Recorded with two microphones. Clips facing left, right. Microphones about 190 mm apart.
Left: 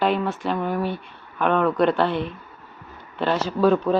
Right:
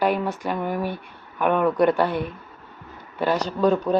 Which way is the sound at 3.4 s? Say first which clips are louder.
Left 4 dB; centre (ahead or behind).